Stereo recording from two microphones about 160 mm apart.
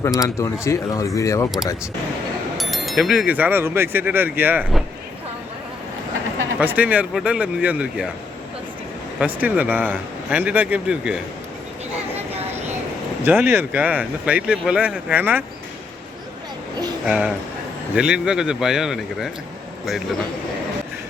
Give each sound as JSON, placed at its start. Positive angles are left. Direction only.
{"t": 0.2, "sound": "speech", "side_deg": 20}
{"t": 2.6, "sound": "speech", "side_deg": 0}
{"t": 6.6, "sound": "speech", "side_deg": -10}
{"t": 9.1, "sound": "speech", "side_deg": -10}
{"t": 12.3, "sound": "vehicle", "side_deg": -40}
{"t": 13.2, "sound": "speech", "side_deg": -15}
{"t": 17.1, "sound": "speech", "side_deg": -5}